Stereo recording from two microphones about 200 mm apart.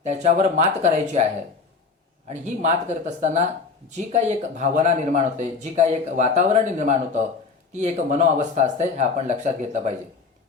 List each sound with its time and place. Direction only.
0.0 s speech: 35° right (ahead or behind)